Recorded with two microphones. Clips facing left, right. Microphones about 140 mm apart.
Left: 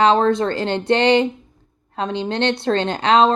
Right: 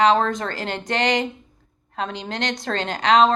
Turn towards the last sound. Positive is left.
turn(degrees=30)  # may be behind; listen again after turning